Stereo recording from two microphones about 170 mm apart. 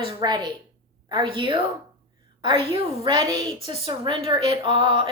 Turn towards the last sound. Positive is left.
turn(degrees=-30)  # may be behind; listen again after turning